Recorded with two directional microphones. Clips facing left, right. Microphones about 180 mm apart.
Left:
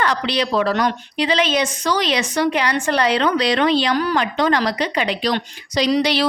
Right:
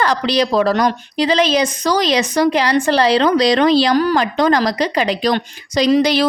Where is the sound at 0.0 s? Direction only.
35° right (ahead or behind).